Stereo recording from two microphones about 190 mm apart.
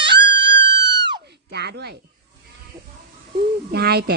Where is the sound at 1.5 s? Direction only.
60° right (ahead or behind).